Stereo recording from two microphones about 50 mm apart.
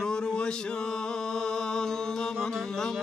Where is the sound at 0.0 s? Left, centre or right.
Centre.